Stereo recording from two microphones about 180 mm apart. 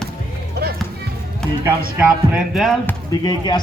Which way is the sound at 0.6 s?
65° right (ahead or behind).